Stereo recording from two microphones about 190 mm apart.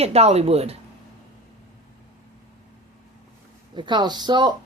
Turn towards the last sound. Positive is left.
turn(degrees=-25)  # may be behind; listen again after turning